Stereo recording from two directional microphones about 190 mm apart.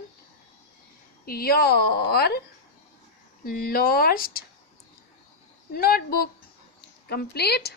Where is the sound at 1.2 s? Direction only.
50° left (ahead or behind).